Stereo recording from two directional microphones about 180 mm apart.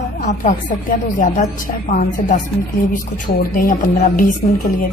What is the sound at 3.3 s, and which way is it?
Speech, 50° left (ahead or behind).